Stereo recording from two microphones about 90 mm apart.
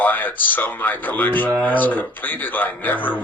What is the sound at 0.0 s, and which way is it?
Speech, 20° left (ahead or behind).